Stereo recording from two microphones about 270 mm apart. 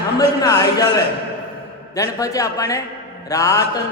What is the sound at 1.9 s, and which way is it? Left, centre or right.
A man's voice, centre.